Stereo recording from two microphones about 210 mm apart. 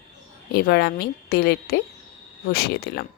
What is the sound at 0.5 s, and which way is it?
Speech, 50° left (ahead or behind).